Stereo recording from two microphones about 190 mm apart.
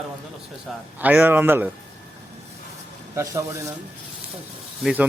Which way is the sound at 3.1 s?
15° right (ahead or behind).